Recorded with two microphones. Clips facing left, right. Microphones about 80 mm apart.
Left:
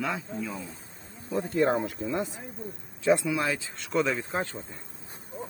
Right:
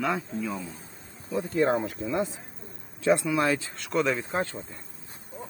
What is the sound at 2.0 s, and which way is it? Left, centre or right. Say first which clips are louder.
Speech: right 1 dB; left.